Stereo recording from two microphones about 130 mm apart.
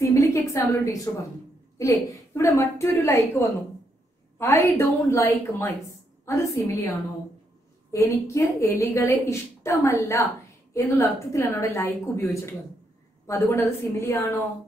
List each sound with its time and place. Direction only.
0.0 s a woman's voice: 25° left (ahead or behind)
7.9 s a woman's voice: 25° left (ahead or behind)